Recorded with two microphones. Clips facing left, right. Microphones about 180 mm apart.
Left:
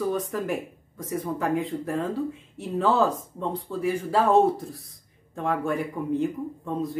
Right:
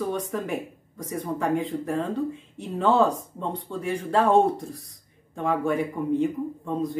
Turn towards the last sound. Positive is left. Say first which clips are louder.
# right 1 dB
turn(degrees=0)  # may be behind; listen again after turning